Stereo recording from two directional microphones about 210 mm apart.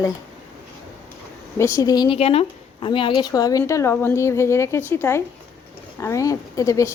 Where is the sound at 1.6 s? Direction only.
15° left (ahead or behind).